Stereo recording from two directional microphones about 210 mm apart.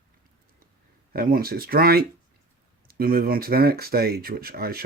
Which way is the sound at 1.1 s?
45° right (ahead or behind).